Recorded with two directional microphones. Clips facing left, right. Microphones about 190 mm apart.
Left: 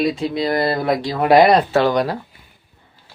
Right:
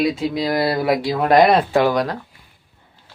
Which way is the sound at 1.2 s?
5° left (ahead or behind).